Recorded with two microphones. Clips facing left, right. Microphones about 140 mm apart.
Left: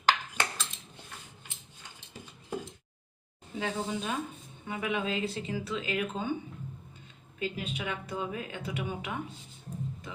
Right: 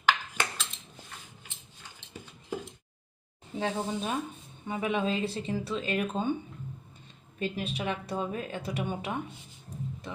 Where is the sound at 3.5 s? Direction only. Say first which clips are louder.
Right 2 dB; 30° right (ahead or behind).